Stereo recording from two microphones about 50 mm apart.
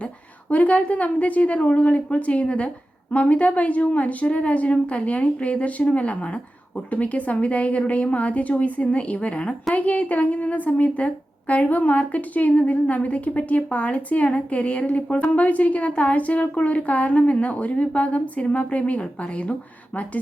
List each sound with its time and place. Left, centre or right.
0.5 s a woman's voice: left